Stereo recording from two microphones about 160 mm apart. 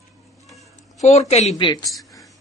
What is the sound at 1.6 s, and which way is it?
Speech, 25° left (ahead or behind).